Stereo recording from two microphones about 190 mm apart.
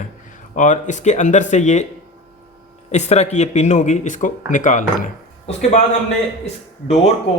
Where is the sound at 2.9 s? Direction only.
35° left (ahead or behind).